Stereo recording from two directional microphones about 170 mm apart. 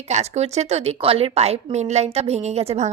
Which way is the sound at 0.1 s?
40° right (ahead or behind).